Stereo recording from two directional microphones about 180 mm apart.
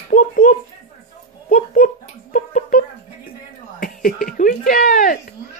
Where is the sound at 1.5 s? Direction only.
50° left (ahead or behind).